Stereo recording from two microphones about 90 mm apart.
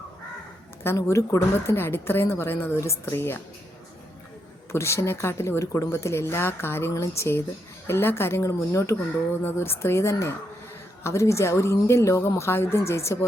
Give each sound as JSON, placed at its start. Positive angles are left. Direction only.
{"t": 0.9, "sound": "speech", "side_deg": 30}
{"t": 4.7, "sound": "speech", "side_deg": 30}